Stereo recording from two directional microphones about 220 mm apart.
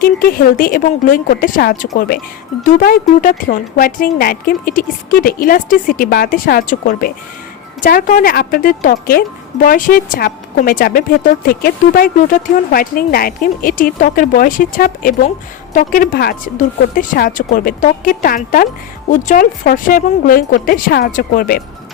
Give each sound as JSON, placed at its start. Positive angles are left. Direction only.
{"t": 0.0, "sound": "a woman's voice", "side_deg": 40}